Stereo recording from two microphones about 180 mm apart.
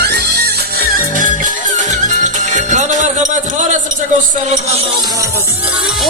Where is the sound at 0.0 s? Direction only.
65° right (ahead or behind); by 3.8 s 45° right (ahead or behind).